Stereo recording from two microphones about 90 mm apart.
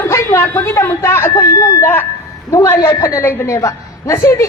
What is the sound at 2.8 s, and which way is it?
A man's voice, 35° left (ahead or behind).